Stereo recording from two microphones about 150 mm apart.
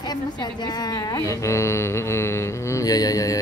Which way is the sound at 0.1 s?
30° left (ahead or behind).